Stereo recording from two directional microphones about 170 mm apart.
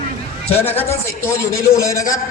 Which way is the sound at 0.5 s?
10° left (ahead or behind).